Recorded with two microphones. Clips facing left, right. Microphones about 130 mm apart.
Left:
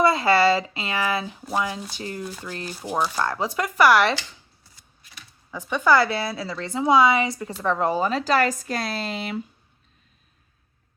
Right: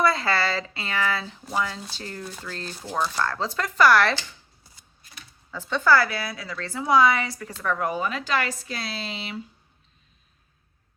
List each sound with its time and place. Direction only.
0.0 s speech: 20° left (ahead or behind)
5.5 s a woman's voice: 15° left (ahead or behind); by 9.4 s 50° left (ahead or behind)